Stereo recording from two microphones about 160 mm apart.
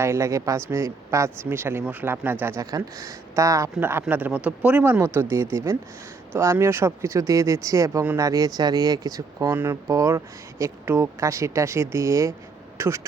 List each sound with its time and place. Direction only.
0.0 s speech: 20° right (ahead or behind)